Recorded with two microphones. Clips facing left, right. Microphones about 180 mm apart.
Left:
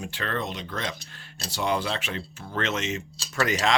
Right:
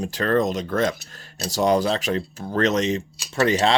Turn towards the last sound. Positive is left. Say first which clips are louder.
# right 6 dB
turn(degrees=-30)  # may be behind; listen again after turning